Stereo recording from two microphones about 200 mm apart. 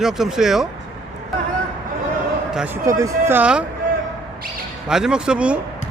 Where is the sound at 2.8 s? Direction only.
15° right (ahead or behind).